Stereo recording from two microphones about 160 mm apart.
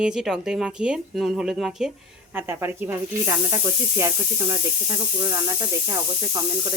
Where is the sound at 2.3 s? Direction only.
15° right (ahead or behind).